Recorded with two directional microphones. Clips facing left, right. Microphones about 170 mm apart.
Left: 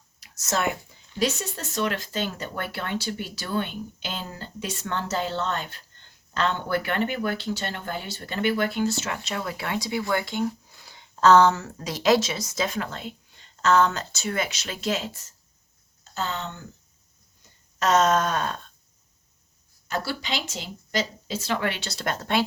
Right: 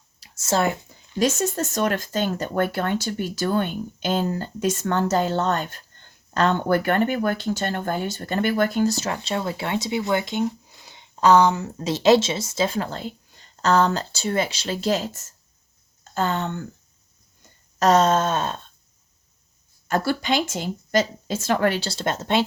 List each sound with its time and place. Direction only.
0.2 s speech: 30° right (ahead or behind)
1.2 s speech: 45° right (ahead or behind)
17.7 s a sound: 35° right (ahead or behind)
19.9 s speech: 50° right (ahead or behind); by 22.4 s 25° right (ahead or behind)